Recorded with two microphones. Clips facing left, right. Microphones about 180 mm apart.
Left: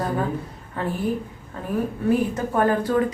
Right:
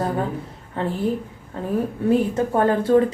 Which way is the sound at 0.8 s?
25° right (ahead or behind).